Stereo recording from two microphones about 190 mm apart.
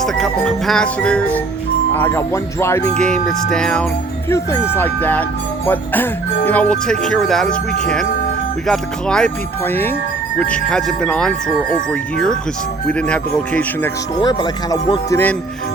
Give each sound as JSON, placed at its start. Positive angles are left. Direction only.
{"t": 0.0, "sound": "music", "side_deg": 0}
{"t": 3.0, "sound": "music", "side_deg": 5}
{"t": 4.3, "sound": "music", "side_deg": 15}
{"t": 8.6, "sound": "music", "side_deg": 5}
{"t": 14.2, "sound": "speech", "side_deg": 20}